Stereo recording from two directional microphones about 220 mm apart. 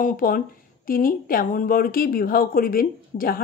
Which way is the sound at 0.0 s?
40° left (ahead or behind).